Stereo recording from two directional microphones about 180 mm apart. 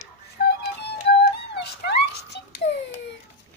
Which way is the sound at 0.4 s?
65° left (ahead or behind).